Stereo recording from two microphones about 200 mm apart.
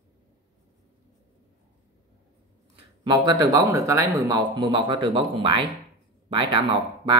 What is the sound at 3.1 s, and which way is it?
Speech, 20° right (ahead or behind).